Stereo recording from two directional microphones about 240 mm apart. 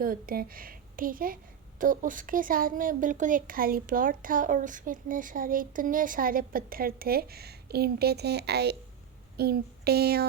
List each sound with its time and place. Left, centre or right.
0.0 s speech: right